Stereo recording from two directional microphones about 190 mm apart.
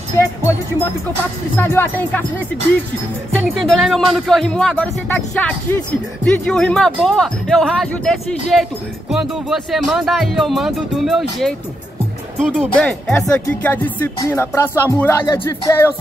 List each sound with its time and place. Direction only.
1.6 s music: 10° left (ahead or behind)
3.3 s speech: centre (ahead or behind)
13.3 s music: 10° left (ahead or behind)